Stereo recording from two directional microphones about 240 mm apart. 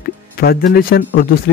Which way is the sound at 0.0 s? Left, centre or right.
Left.